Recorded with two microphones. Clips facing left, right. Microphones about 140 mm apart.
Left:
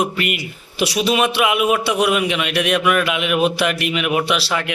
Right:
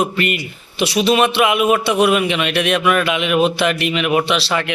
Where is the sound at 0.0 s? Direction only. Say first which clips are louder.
Right 2 dB; 5° left (ahead or behind).